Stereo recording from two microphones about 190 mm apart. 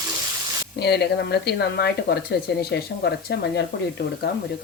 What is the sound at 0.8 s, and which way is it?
A woman's voice, 60° left (ahead or behind).